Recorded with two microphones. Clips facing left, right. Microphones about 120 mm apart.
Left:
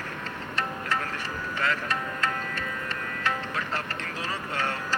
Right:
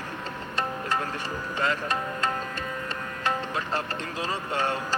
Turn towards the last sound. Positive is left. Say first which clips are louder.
# right 2 dB
turn(degrees=-15)  # may be behind; listen again after turning